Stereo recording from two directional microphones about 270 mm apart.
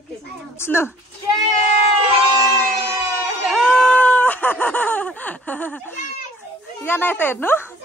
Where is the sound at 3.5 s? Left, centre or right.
Centre.